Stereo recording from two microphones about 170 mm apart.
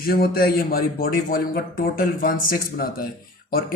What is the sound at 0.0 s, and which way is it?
A man's voice, 60° left (ahead or behind).